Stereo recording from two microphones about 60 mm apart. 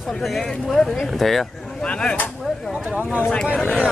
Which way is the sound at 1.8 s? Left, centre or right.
Centre.